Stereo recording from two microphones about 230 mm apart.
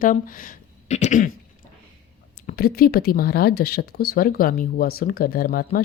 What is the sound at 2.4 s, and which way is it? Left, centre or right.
Speech, left.